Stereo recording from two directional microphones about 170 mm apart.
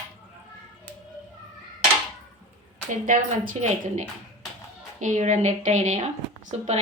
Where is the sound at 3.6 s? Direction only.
45° right (ahead or behind).